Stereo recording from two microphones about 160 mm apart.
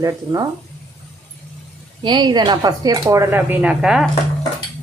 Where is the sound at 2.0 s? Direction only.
25° right (ahead or behind); by 4.1 s 5° right (ahead or behind).